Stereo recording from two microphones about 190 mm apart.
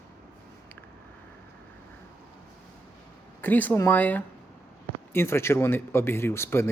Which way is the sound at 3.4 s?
10° left (ahead or behind).